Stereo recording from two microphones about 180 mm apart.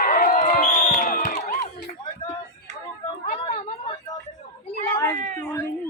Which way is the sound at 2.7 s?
40° right (ahead or behind).